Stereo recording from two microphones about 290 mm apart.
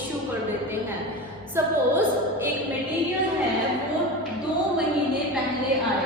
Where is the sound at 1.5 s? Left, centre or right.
Centre.